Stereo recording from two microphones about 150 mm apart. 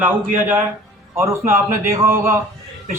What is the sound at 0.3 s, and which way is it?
A man's voice, 15° right (ahead or behind).